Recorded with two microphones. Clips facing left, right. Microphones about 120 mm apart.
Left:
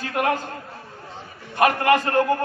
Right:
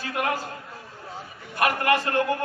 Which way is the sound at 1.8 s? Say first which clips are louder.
Left 4 dB; 45° left (ahead or behind).